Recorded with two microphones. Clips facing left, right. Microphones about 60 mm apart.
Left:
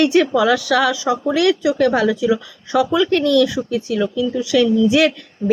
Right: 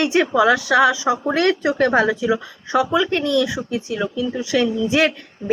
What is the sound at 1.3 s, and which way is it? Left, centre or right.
Speech, right.